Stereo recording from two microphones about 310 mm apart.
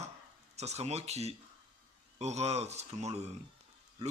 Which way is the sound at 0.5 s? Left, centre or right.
Right.